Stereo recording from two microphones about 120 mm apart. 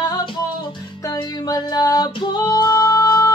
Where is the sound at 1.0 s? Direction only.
30° left (ahead or behind).